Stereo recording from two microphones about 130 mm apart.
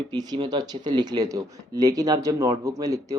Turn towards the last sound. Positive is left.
turn(degrees=-25)  # may be behind; listen again after turning